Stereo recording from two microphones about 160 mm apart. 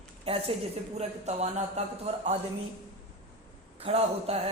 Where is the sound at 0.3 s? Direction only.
40° right (ahead or behind).